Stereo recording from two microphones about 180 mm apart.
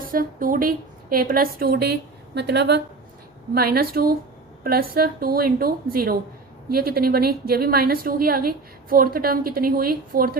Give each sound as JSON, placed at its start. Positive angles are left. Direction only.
{"t": 0.0, "sound": "a woman's voice", "side_deg": -50}
{"t": 3.5, "sound": "a woman's voice", "side_deg": -55}